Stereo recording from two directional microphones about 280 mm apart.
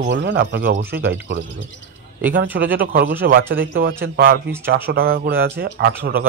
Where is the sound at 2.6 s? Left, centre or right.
Right.